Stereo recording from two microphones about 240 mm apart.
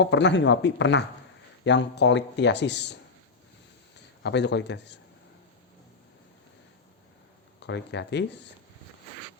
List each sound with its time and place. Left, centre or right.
0.0 s speech: left
4.2 s speech: left
7.6 s speech: left